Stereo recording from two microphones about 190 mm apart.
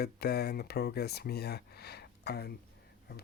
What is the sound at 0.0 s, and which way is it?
Speech, 55° left (ahead or behind).